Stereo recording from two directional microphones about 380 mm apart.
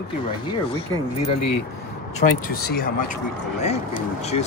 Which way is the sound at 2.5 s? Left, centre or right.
Left.